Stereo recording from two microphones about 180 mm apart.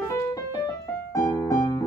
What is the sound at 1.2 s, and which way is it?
Keyboard, 20° left (ahead or behind).